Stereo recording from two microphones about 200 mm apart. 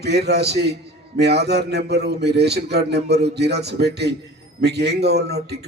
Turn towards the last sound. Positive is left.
turn(degrees=-55)  # may be behind; listen again after turning